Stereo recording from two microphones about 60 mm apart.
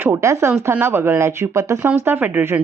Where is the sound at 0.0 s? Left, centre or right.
Right.